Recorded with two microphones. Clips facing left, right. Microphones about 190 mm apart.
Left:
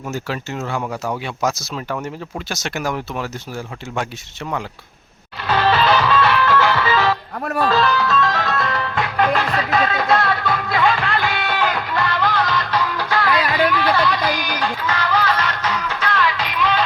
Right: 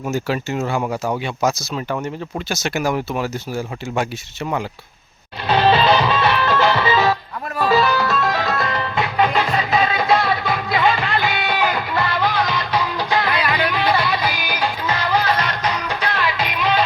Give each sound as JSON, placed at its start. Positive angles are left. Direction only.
{"t": 0.1, "sound": "speech", "side_deg": -10}
{"t": 5.5, "sound": "music", "side_deg": -20}